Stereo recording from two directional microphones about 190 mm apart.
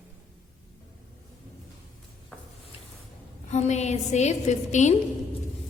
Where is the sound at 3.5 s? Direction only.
35° left (ahead or behind).